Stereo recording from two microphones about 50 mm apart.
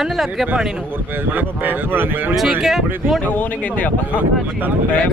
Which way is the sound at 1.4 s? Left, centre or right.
Right.